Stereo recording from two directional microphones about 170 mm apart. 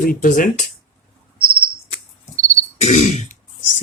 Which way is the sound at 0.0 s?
55° left (ahead or behind).